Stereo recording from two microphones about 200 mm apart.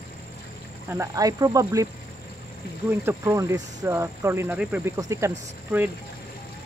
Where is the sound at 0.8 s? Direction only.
15° right (ahead or behind).